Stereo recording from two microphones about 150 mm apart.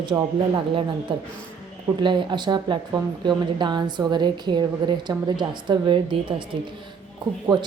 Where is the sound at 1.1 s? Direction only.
35° right (ahead or behind).